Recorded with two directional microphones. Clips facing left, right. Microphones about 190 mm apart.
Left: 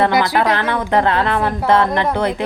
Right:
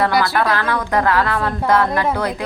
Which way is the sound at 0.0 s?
20° left (ahead or behind).